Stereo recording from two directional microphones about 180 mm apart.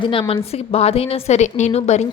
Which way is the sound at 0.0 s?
30° left (ahead or behind).